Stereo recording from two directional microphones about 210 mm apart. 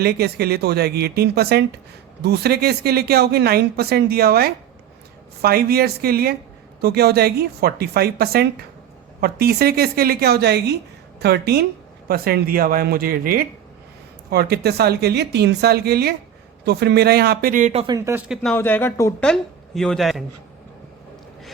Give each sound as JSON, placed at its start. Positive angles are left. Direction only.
{"t": 0.0, "sound": "speech", "side_deg": -50}
{"t": 17.9, "sound": "speech", "side_deg": -10}
{"t": 18.5, "sound": "speech", "side_deg": 10}